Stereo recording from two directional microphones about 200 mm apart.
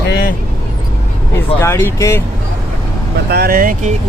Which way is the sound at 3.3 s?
50° right (ahead or behind).